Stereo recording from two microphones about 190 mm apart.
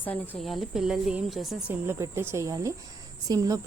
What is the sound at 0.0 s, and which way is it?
A woman's voice, 10° left (ahead or behind).